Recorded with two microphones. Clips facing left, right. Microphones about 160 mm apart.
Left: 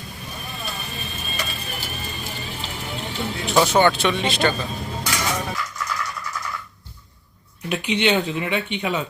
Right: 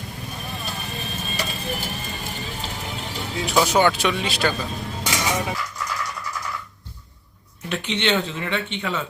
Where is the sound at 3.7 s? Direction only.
5° right (ahead or behind).